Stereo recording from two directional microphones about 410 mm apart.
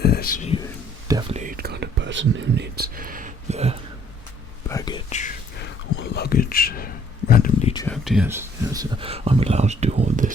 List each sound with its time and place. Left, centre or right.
0.0 s speech: left
1.0 s whispering: centre
4.7 s whispering: centre